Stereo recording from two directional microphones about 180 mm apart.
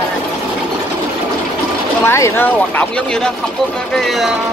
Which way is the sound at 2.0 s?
15° left (ahead or behind).